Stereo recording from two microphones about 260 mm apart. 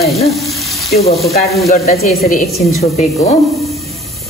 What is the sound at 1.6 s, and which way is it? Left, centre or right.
Speech, left.